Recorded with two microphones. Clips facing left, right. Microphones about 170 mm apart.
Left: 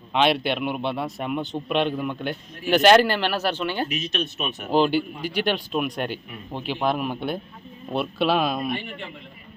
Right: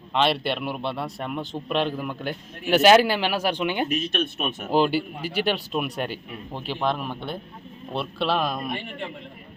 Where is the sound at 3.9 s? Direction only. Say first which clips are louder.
Right 2 dB; 55° right (ahead or behind).